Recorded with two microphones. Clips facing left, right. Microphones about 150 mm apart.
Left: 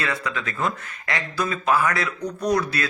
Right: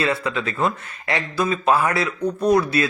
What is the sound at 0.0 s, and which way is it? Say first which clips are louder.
Speech: right 5 dB; 25° right (ahead or behind).